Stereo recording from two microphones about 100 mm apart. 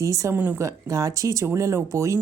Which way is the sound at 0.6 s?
35° right (ahead or behind).